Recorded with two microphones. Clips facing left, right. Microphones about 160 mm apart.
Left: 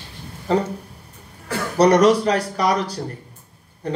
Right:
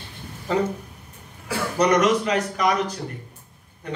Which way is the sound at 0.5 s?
35° left (ahead or behind).